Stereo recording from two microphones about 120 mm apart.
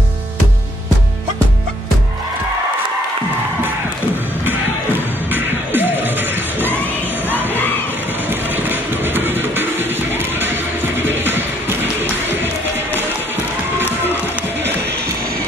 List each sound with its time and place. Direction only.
5.3 s music: 15° right (ahead or behind)
8.3 s music: 15° right (ahead or behind)